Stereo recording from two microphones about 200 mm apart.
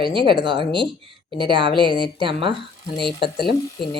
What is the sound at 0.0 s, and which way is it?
Speech, 25° right (ahead or behind).